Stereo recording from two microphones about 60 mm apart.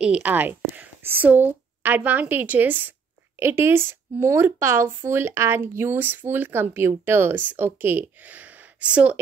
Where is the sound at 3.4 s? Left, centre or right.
Right.